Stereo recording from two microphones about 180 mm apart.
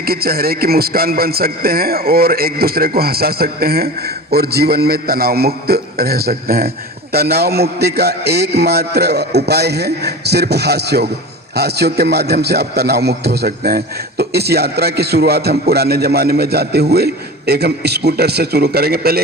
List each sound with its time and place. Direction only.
0.0 s a man's voice: 55° right (ahead or behind)